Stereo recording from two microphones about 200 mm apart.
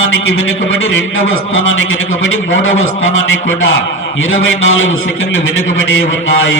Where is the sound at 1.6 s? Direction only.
75° left (ahead or behind).